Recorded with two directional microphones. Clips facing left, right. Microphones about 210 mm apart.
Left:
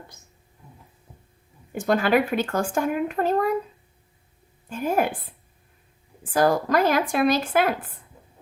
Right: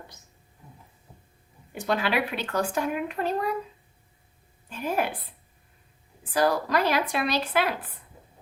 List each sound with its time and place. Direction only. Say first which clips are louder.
1.7 s speech: left 6 dB; 45° left (ahead or behind)
4.7 s speech: left 4 dB; 50° left (ahead or behind)
6.3 s speech: left 4 dB; 50° left (ahead or behind)